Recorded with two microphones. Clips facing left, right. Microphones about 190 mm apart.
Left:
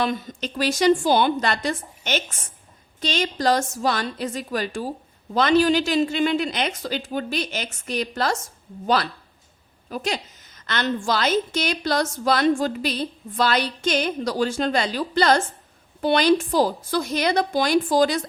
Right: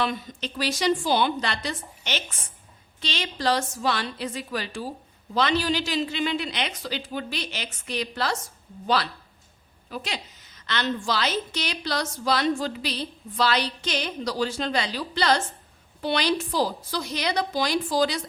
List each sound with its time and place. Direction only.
0.0 s a woman's voice: 45° left (ahead or behind)
9.9 s a woman's voice: 45° left (ahead or behind)